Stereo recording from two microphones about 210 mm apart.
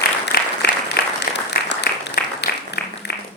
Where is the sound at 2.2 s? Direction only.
45° left (ahead or behind).